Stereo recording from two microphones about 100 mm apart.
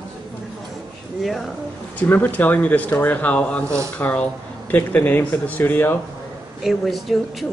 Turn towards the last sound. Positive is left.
turn(degrees=0)  # may be behind; listen again after turning